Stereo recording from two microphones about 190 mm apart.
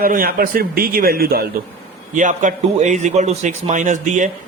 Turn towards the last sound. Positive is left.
turn(degrees=-40)  # may be behind; listen again after turning